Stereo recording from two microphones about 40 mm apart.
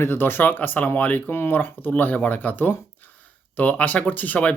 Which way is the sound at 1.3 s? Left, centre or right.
Left.